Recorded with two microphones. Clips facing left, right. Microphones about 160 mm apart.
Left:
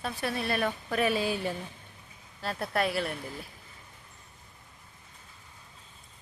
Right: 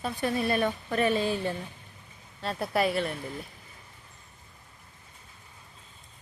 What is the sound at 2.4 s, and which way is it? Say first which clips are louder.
Speech: right 3 dB; centre (ahead or behind).